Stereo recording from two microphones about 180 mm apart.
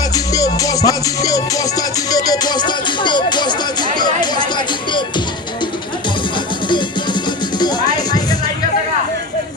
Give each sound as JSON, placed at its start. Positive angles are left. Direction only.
{"t": 0.1, "sound": "music", "side_deg": 20}
{"t": 6.7, "sound": "music", "side_deg": 25}